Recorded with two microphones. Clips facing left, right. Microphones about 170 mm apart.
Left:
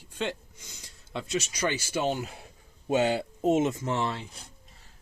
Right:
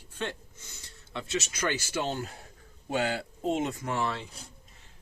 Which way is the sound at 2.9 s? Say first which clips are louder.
Left 5 dB; 20° left (ahead or behind).